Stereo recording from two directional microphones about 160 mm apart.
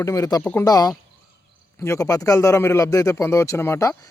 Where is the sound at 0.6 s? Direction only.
25° left (ahead or behind).